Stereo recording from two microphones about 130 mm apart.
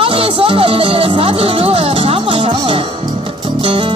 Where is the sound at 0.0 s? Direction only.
45° right (ahead or behind).